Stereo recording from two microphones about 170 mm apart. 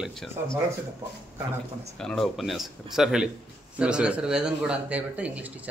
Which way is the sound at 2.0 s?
5° left (ahead or behind).